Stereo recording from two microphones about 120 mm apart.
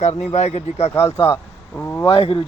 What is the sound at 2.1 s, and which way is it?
Speech, 50° left (ahead or behind).